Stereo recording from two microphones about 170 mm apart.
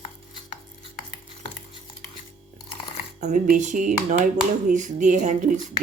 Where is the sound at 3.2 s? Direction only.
45° right (ahead or behind).